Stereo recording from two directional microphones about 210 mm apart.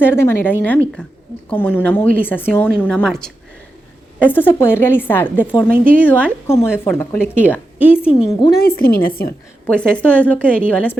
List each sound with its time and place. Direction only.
0.0 s a woman's voice: 10° left (ahead or behind)
8.0 s a woman's voice: 5° right (ahead or behind)
8.5 s a woman's voice: 45° left (ahead or behind)
9.6 s a woman's voice: 5° left (ahead or behind)